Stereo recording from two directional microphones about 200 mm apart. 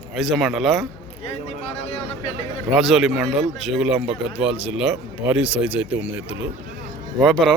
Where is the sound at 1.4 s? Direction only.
30° left (ahead or behind).